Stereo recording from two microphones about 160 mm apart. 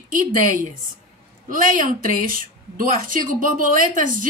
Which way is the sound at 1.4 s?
60° right (ahead or behind).